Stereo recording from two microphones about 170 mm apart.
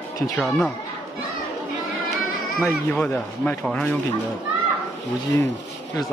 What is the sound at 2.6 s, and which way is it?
Speech, 10° left (ahead or behind).